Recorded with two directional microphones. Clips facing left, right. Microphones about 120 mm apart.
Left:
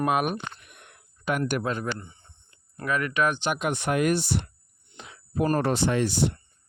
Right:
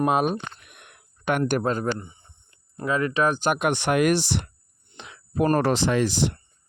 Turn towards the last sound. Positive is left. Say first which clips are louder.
# right 2 dB
turn(degrees=-90)